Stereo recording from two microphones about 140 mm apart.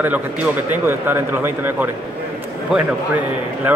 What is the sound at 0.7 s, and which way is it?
Speech, 15° right (ahead or behind).